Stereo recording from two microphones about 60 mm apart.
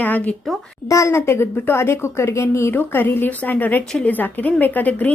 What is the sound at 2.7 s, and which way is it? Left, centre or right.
A woman's voice, left.